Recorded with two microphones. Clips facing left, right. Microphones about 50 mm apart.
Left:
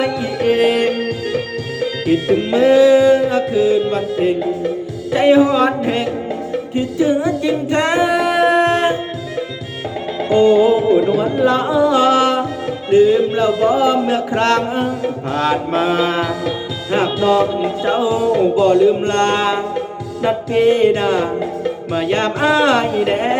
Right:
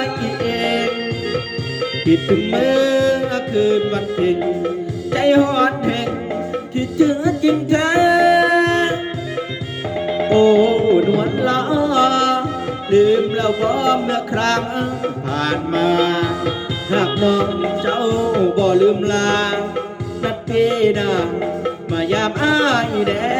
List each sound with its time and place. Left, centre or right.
0.0 s music: left
2.5 s music: centre
5.1 s speech: centre
6.7 s music: left
10.2 s music: right
11.3 s music: left